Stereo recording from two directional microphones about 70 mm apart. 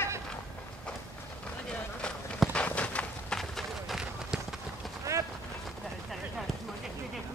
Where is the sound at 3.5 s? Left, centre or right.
Centre.